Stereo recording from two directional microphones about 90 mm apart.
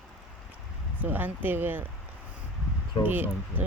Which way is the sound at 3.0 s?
20° right (ahead or behind).